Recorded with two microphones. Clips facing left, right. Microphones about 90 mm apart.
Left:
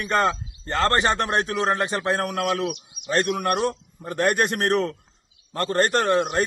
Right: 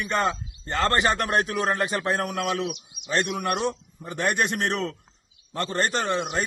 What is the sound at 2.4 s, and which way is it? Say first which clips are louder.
A man's voice: left 3 dB; 50° left (ahead or behind).